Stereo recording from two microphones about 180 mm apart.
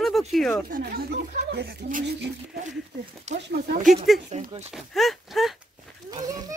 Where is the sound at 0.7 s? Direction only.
50° right (ahead or behind).